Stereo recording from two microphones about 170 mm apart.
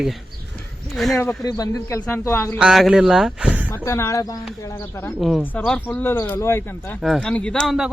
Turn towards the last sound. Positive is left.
turn(degrees=0)  # may be behind; listen again after turning